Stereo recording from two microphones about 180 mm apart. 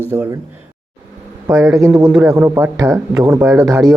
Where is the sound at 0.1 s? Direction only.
10° right (ahead or behind).